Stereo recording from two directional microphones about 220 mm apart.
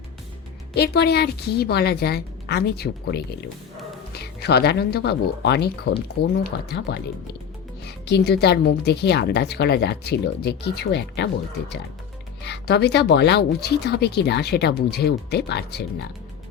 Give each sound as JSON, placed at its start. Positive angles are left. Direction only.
{"t": 0.7, "sound": "speech", "side_deg": 50}
{"t": 12.4, "sound": "speech", "side_deg": 50}